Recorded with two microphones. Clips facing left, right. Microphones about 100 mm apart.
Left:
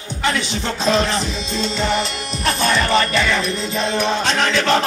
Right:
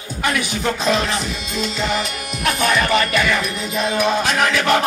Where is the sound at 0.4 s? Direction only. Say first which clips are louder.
Right 2 dB; 30° left (ahead or behind).